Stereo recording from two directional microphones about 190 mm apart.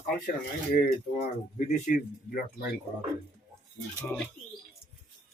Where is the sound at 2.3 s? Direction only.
55° left (ahead or behind).